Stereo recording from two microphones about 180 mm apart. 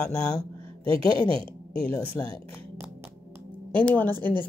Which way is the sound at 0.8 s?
30° right (ahead or behind).